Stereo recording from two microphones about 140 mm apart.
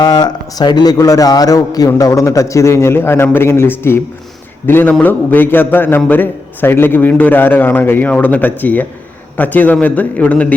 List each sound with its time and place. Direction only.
0.0 s a man's voice: 30° left (ahead or behind); by 10.5 s 10° left (ahead or behind)